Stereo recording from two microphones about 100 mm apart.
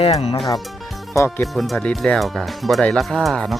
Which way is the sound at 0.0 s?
90° left.